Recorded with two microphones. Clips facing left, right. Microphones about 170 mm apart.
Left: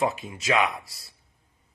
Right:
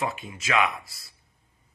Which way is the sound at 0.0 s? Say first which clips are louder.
Left 4 dB; 40° left (ahead or behind).